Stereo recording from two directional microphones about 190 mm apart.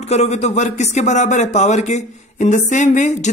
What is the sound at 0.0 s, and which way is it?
Speech, 35° left (ahead or behind).